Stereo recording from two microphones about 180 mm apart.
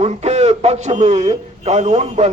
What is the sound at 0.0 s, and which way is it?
A man's voice, 35° right (ahead or behind).